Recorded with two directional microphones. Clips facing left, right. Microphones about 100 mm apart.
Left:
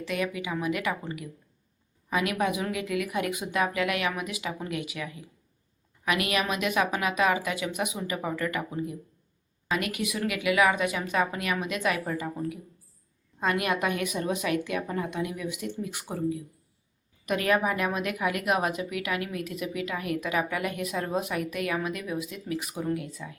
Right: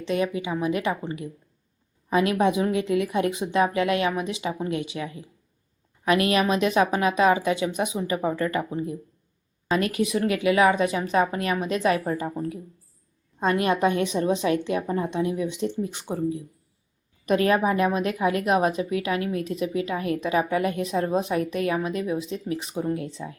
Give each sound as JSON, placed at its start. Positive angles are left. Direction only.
{"t": 0.0, "sound": "a woman's voice", "side_deg": -30}